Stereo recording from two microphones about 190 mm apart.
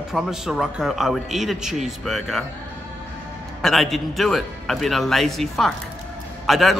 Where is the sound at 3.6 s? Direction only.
Centre (ahead or behind).